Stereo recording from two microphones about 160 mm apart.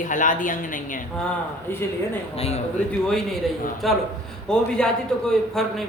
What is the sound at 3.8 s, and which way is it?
A man's voice, centre (ahead or behind).